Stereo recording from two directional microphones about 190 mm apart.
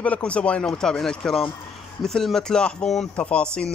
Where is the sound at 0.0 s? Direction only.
5° left (ahead or behind).